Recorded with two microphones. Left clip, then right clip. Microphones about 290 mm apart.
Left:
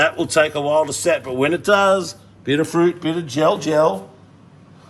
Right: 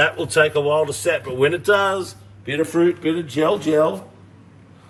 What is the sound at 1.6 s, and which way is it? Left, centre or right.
Speech, centre.